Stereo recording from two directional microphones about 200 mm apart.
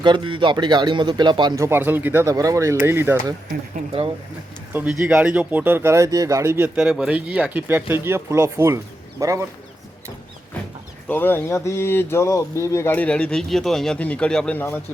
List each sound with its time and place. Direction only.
0.0 s speech: 25° right (ahead or behind)
4.7 s speech: 10° right (ahead or behind)
6.7 s speech: 5° right (ahead or behind)
11.1 s speech: 10° left (ahead or behind)